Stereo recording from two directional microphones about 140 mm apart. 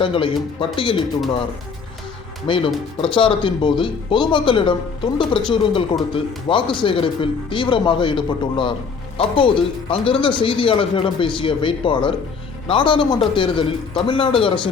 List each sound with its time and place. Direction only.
0.0 s speech: 40° left (ahead or behind)
2.5 s speech: 40° left (ahead or behind)